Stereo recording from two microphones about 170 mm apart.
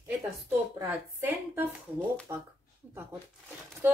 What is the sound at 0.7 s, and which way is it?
Speech, 10° right (ahead or behind).